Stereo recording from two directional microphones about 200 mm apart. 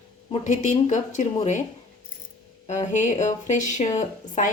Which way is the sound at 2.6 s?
35° left (ahead or behind).